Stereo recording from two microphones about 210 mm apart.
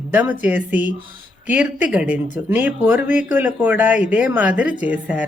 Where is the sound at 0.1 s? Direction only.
10° right (ahead or behind).